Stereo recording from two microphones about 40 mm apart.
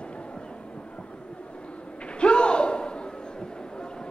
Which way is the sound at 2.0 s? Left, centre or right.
Left.